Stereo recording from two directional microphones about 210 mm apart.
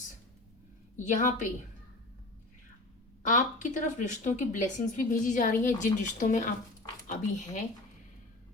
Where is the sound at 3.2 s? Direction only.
35° left (ahead or behind).